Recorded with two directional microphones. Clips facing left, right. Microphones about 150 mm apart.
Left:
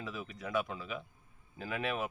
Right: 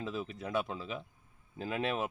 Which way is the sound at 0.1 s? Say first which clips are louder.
Even; 30° right (ahead or behind).